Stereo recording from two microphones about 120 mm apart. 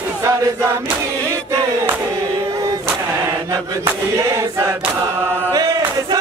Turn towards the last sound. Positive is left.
turn(degrees=-35)  # may be behind; listen again after turning